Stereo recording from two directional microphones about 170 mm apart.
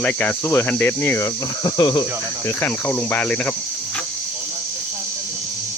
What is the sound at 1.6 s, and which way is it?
Cricket, 25° left (ahead or behind).